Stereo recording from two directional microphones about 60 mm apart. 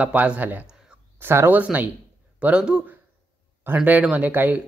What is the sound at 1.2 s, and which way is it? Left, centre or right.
Speech, right.